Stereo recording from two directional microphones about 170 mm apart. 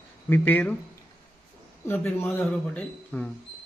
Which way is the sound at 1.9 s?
10° left (ahead or behind).